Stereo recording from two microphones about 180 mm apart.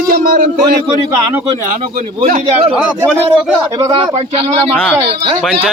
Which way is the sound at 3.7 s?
25° right (ahead or behind).